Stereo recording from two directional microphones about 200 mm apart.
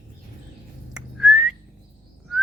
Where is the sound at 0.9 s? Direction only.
Centre (ahead or behind).